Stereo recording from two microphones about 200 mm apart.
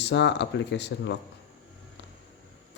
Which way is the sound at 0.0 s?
60° left (ahead or behind).